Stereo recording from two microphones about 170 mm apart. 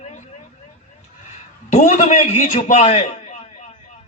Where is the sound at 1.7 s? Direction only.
45° left (ahead or behind).